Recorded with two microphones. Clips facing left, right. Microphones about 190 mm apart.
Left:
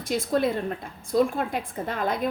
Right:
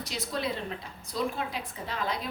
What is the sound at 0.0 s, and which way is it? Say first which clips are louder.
A woman's voice: left 9 dB; 50° left (ahead or behind).